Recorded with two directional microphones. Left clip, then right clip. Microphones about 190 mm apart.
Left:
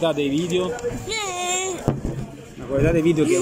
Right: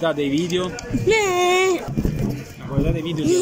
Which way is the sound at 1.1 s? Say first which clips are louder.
Right 11 dB; 35° right (ahead or behind).